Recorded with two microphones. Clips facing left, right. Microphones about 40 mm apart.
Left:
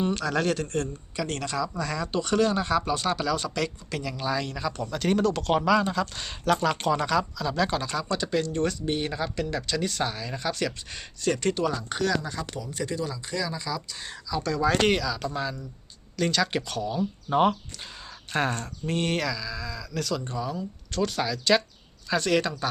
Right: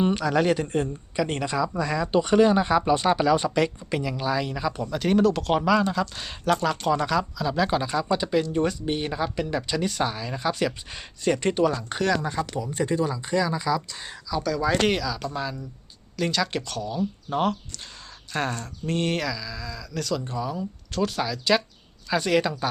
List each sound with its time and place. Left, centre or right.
0.0 s speech: centre
18.3 s speech: left
18.6 s speech: centre